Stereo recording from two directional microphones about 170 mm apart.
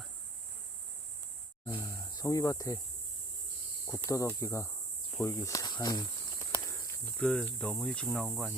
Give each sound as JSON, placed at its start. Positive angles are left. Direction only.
{"t": 1.6, "sound": "speech", "side_deg": 15}
{"t": 3.8, "sound": "speech", "side_deg": 20}